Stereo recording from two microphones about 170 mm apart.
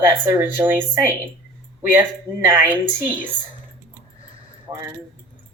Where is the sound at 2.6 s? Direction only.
10° right (ahead or behind).